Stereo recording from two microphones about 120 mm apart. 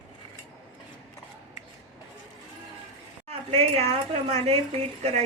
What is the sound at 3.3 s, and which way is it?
Speech, 60° right (ahead or behind).